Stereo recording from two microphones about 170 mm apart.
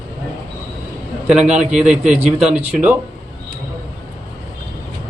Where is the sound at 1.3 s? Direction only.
5° right (ahead or behind).